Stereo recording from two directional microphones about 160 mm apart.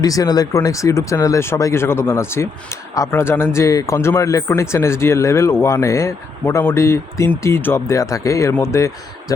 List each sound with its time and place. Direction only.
0.0 s speech: 25° left (ahead or behind)